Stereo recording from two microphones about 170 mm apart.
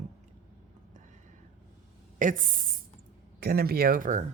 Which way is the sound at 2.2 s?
50° right (ahead or behind).